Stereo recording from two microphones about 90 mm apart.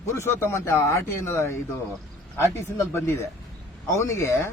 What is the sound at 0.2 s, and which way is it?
Speech, 30° left (ahead or behind).